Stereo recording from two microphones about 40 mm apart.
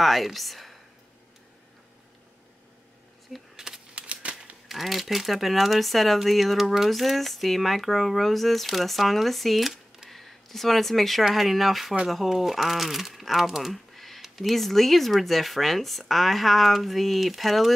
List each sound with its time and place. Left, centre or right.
0.0 s speech: centre
3.5 s typewriter: centre
3.9 s typewriter: right
4.6 s speech: centre
10.0 s a sound: centre
11.2 s speech: centre